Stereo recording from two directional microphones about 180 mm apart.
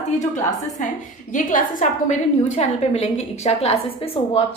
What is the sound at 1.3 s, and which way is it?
Speech, 45° left (ahead or behind).